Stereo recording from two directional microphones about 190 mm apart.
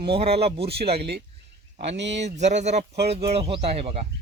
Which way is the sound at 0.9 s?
60° right (ahead or behind).